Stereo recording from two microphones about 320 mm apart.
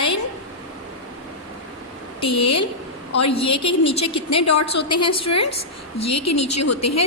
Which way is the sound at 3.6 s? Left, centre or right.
Centre.